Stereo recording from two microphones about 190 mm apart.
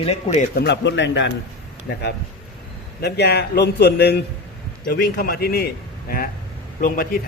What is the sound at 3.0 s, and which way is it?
A man's voice, 60° left (ahead or behind).